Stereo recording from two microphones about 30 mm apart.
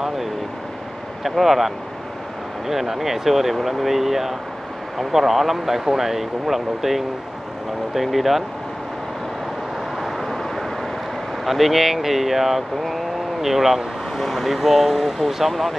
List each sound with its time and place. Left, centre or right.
1.2 s speech: centre
2.7 s speech: centre
10.0 s vehicle: centre
11.4 s speech: centre
14.1 s speech: centre
14.5 s speech: centre